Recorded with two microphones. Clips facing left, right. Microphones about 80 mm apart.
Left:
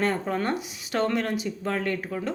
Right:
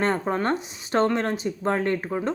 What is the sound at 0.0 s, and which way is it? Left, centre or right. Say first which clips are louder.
Speech: right 2 dB; right.